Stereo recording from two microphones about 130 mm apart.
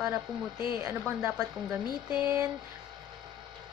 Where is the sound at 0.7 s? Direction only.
20° right (ahead or behind).